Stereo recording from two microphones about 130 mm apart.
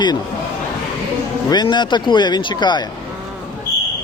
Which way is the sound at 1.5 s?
35° left (ahead or behind).